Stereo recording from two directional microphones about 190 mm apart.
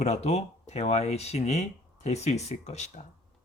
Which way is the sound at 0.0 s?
35° left (ahead or behind).